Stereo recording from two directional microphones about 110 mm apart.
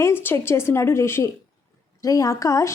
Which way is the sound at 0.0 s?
20° left (ahead or behind).